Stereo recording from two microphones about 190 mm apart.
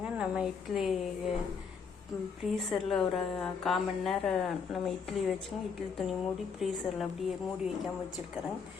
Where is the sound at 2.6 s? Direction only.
Centre (ahead or behind).